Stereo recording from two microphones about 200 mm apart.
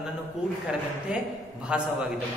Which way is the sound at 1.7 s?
5° right (ahead or behind).